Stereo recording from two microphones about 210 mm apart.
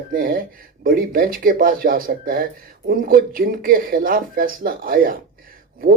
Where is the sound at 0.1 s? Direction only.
40° right (ahead or behind).